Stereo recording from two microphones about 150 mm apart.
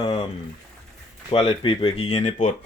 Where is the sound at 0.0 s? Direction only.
35° left (ahead or behind).